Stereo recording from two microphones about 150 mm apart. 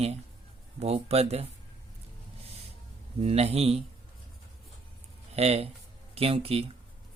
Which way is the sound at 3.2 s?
40° right (ahead or behind).